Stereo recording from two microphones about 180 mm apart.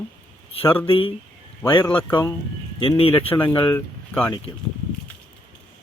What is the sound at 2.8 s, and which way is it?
Speech, 30° left (ahead or behind).